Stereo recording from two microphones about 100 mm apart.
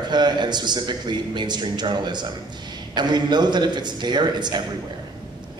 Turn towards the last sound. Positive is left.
turn(degrees=-45)  # may be behind; listen again after turning